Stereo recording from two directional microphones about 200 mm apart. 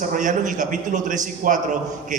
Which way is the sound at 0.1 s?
40° right (ahead or behind).